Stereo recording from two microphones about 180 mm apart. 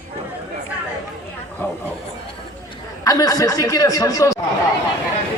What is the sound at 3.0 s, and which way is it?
Speech, 20° left (ahead or behind).